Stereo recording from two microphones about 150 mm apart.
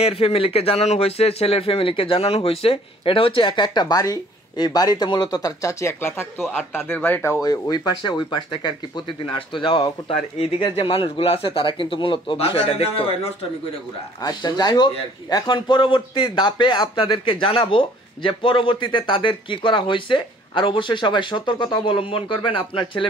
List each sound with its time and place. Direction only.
0.0 s speech: 40° left (ahead or behind)
14.2 s speech: 30° left (ahead or behind)